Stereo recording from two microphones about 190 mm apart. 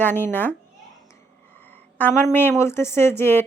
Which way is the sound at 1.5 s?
10° left (ahead or behind).